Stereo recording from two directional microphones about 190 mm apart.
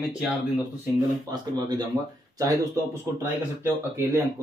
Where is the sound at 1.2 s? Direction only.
20° right (ahead or behind).